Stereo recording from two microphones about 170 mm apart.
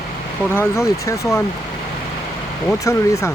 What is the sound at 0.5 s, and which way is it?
Speech, 15° left (ahead or behind).